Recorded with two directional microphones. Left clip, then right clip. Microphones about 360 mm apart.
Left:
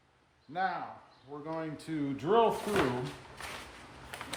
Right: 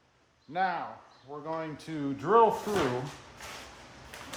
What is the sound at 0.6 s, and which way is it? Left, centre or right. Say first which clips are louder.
Speech: right 3 dB; centre.